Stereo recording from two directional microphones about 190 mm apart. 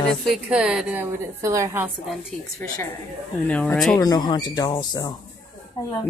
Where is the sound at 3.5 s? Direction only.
5° left (ahead or behind).